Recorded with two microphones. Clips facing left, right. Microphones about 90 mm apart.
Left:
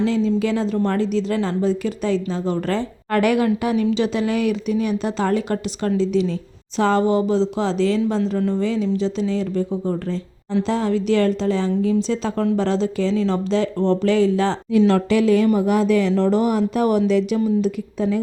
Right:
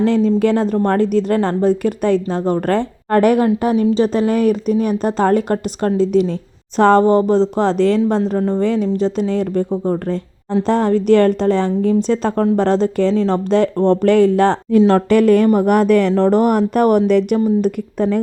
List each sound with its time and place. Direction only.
0.0 s a woman's voice: 50° right (ahead or behind)
14.8 s a woman's voice: 45° right (ahead or behind)